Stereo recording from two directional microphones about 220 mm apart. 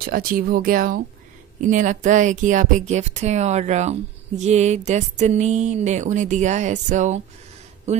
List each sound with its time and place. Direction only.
0.0 s speech: 40° right (ahead or behind)